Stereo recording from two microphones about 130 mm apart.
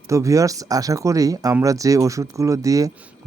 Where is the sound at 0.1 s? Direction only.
25° right (ahead or behind).